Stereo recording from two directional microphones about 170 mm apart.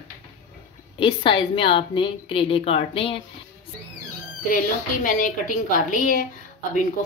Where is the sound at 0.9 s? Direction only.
30° left (ahead or behind).